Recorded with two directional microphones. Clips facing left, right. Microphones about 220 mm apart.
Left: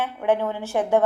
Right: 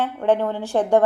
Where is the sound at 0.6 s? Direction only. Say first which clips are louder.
Right 3 dB; 15° right (ahead or behind).